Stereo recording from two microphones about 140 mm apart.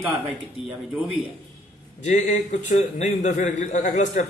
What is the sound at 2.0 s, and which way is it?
A man's voice, 60° left (ahead or behind).